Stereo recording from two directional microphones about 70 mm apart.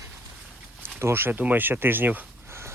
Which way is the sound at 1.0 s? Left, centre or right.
Right.